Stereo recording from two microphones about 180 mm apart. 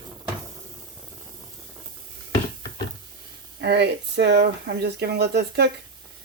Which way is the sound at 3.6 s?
70° right (ahead or behind).